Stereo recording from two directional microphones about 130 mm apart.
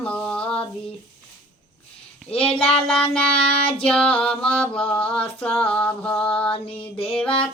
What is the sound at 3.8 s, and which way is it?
Female singing, 5° left (ahead or behind).